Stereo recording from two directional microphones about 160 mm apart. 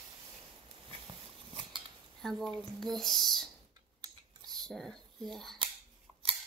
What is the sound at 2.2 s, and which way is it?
Speech, centre (ahead or behind).